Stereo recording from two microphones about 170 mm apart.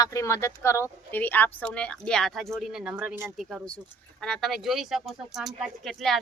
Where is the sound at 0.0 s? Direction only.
20° left (ahead or behind); by 3.3 s 10° right (ahead or behind).